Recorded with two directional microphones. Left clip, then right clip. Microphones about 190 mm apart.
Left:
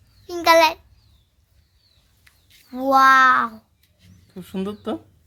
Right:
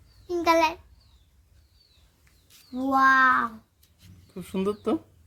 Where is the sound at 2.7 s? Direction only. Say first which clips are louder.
Left 6 dB; 65° left (ahead or behind).